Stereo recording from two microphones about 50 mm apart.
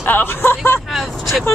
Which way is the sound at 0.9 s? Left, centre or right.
Centre.